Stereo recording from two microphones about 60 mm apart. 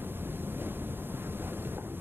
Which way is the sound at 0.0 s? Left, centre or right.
Right.